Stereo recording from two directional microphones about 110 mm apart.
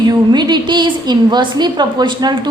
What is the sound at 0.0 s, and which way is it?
A woman's voice, 40° right (ahead or behind).